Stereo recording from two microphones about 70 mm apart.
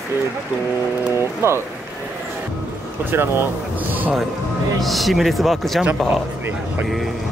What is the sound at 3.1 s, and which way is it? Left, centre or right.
Speech, right.